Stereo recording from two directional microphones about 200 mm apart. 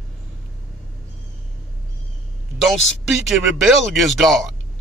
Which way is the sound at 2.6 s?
Centre (ahead or behind).